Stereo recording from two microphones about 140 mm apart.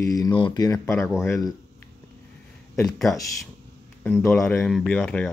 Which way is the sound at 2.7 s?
Centre (ahead or behind).